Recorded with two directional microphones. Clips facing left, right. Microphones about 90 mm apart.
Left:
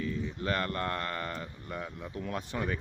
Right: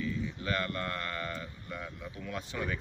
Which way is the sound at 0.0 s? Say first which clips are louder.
Left 1 dB; 40° left (ahead or behind).